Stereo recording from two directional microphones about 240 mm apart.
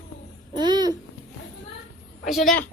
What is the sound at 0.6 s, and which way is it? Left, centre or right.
Babbling, centre.